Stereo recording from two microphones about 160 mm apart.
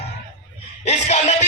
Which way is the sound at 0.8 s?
45° left (ahead or behind).